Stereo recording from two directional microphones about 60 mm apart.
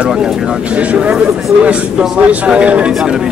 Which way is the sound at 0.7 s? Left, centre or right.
Right.